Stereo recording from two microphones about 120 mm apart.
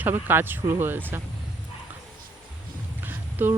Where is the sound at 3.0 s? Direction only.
15° right (ahead or behind).